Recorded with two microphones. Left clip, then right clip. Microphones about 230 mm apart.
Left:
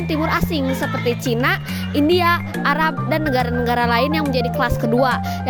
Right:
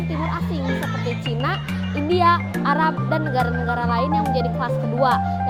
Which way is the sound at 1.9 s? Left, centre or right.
Left.